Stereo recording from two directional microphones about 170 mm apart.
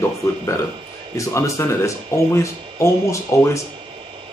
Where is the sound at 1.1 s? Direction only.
15° left (ahead or behind).